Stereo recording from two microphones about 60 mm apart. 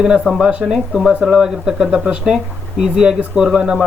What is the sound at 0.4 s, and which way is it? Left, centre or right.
Speech, centre.